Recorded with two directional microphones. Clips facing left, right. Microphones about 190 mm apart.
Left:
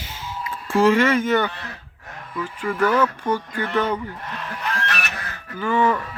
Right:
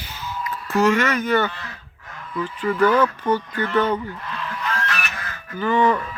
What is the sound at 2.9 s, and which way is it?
Speech, 10° right (ahead or behind).